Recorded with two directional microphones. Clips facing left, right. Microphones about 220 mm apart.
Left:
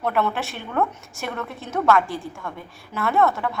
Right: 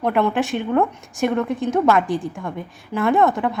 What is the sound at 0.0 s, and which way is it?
A woman's voice, 15° right (ahead or behind).